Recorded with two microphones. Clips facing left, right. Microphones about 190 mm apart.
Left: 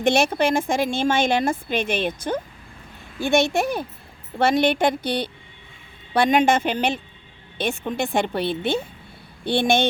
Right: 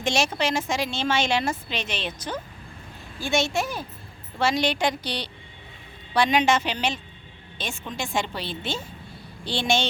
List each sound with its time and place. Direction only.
0.0 s a woman's voice: 55° left (ahead or behind)